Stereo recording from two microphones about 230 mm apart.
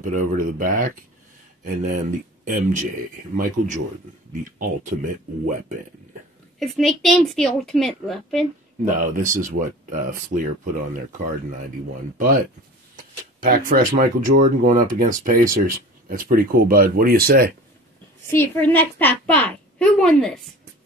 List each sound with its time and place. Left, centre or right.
0.0 s speech: right
6.6 s a woman's voice: centre
8.8 s speech: right
13.5 s speech: right
18.3 s a woman's voice: centre